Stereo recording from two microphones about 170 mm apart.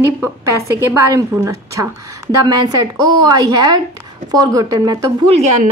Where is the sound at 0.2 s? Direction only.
15° right (ahead or behind).